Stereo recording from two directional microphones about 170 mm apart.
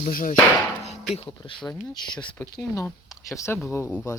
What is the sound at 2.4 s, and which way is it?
Speech, 10° left (ahead or behind).